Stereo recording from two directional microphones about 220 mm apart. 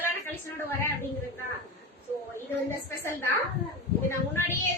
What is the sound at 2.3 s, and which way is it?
A woman's voice, 10° left (ahead or behind).